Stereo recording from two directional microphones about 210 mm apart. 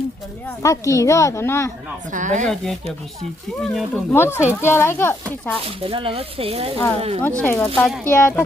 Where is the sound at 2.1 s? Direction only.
35° right (ahead or behind).